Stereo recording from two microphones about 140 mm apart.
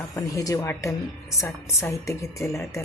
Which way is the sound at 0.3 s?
20° left (ahead or behind).